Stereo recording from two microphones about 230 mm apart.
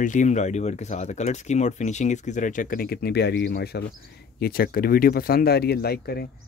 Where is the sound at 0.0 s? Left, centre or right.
Left.